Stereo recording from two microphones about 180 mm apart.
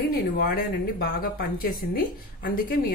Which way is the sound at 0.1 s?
55° left (ahead or behind).